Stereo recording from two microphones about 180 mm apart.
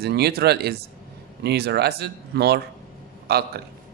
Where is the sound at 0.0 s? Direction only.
60° right (ahead or behind).